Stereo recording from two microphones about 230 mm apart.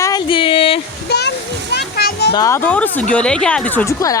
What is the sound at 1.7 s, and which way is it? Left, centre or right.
Music, left.